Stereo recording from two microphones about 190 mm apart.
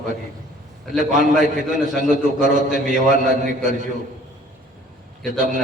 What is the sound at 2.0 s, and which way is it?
A man's voice, 40° right (ahead or behind).